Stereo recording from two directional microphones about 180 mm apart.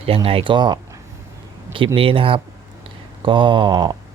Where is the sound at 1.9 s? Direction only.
30° right (ahead or behind).